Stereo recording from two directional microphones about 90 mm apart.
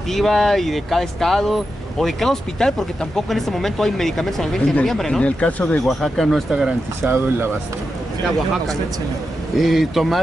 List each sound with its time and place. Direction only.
0.1 s speech: 5° left (ahead or behind)
5.2 s speech: 15° left (ahead or behind)
7.0 s speech: 25° right (ahead or behind)
9.6 s speech: centre (ahead or behind)